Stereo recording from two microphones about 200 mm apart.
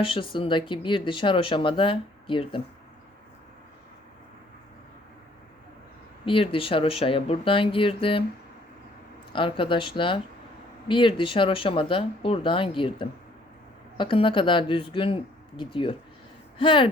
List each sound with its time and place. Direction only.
0.0 s speech: 25° left (ahead or behind)
6.2 s speech: 25° left (ahead or behind)
9.3 s speech: 25° left (ahead or behind)